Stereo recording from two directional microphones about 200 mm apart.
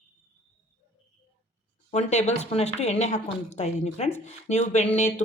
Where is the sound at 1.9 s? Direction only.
35° left (ahead or behind).